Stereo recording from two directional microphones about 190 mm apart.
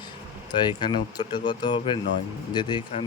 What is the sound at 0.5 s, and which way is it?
Speech, 25° left (ahead or behind).